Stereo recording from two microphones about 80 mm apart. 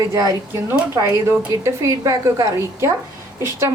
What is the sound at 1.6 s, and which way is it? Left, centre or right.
Speech, right.